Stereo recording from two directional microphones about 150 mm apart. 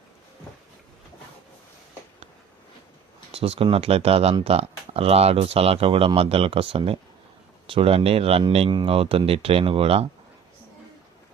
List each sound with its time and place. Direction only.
3.3 s speech: 40° right (ahead or behind)